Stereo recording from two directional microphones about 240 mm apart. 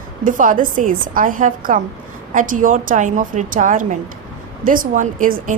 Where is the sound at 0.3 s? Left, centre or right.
Right.